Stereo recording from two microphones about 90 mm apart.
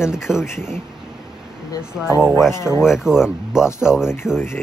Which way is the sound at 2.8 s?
5° right (ahead or behind).